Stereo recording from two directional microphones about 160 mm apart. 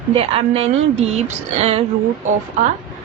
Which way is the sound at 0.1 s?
35° right (ahead or behind).